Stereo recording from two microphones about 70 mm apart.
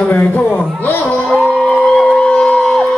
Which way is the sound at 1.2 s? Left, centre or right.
Centre.